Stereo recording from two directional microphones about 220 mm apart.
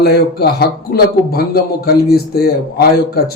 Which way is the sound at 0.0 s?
45° left (ahead or behind).